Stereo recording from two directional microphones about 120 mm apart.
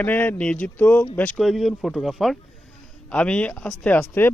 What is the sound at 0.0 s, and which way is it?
Speech, 15° left (ahead or behind).